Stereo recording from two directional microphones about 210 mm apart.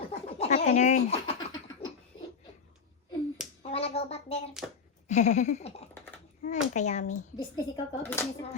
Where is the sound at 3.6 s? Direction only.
30° left (ahead or behind).